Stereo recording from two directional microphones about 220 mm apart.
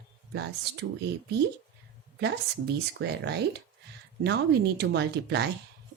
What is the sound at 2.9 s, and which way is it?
Speech, 50° right (ahead or behind).